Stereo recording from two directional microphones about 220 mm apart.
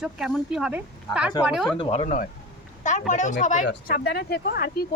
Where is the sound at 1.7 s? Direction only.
25° left (ahead or behind).